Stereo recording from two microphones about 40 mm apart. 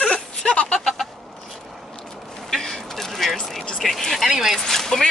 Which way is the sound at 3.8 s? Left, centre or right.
Centre.